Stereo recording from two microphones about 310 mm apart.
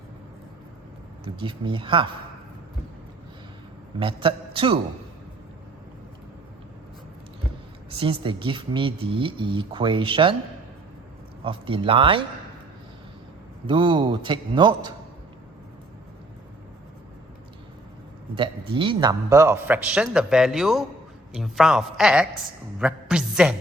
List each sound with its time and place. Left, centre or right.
1.2 s speech: centre
4.0 s speech: centre
7.9 s speech: centre
11.4 s speech: centre
13.7 s speech: centre
18.3 s a man's voice: centre